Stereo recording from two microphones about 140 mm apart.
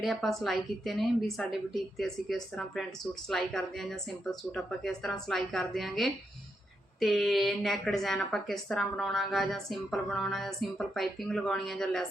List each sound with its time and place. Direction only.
0.0 s a woman's voice: centre (ahead or behind)